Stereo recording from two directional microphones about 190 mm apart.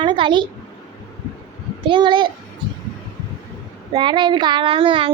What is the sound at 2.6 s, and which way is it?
Heart sounds, 25° right (ahead or behind).